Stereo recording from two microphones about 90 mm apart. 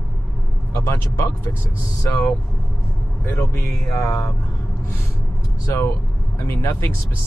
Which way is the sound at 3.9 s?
35° left (ahead or behind).